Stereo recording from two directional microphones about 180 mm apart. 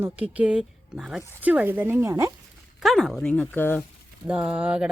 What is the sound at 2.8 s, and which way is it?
A woman's voice, centre (ahead or behind).